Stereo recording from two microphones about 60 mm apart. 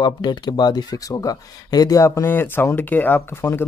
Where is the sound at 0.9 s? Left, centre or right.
Left.